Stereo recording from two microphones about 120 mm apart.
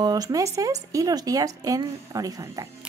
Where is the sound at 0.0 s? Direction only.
35° right (ahead or behind).